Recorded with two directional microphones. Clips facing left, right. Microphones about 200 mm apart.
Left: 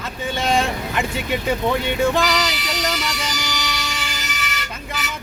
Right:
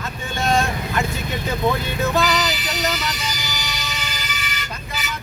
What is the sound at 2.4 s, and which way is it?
Vehicle, 85° left.